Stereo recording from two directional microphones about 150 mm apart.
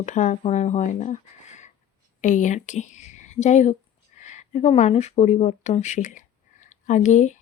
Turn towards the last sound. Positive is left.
turn(degrees=55)  # may be behind; listen again after turning